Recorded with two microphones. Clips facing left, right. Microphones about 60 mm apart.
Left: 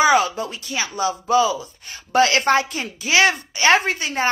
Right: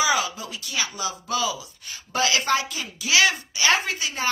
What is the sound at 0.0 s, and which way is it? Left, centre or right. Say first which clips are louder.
Speech: left 7 dB; left.